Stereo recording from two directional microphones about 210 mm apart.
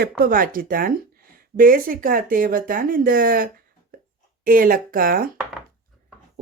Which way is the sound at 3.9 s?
40° right (ahead or behind).